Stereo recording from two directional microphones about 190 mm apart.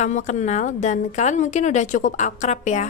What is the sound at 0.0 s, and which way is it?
A woman's voice, 40° left (ahead or behind).